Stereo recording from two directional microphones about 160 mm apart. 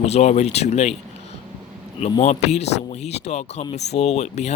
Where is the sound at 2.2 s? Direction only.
45° left (ahead or behind).